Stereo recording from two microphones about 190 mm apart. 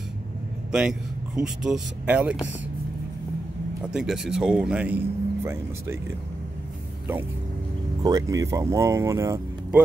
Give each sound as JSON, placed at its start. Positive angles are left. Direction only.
{"t": 0.7, "sound": "speech", "side_deg": -5}
{"t": 3.8, "sound": "speech", "side_deg": -5}
{"t": 8.0, "sound": "speech", "side_deg": -20}